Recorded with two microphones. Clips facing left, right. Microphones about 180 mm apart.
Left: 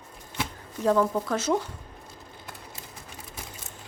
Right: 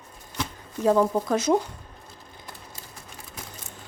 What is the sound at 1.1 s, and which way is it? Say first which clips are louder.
Speech: right 4 dB; 15° right (ahead or behind).